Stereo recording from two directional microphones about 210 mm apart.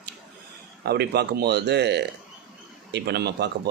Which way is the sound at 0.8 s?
50° right (ahead or behind).